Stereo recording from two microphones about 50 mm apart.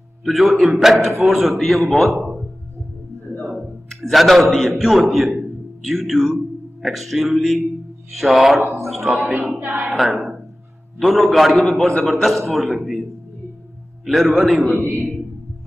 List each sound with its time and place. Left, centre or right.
0.2 s a man's voice: centre
3.9 s a man's voice: centre
9.5 s a woman's voice: right
9.8 s a man's voice: centre
14.0 s a man's voice: centre